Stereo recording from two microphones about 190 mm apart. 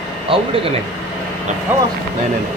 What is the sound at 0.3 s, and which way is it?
Speech, 30° right (ahead or behind).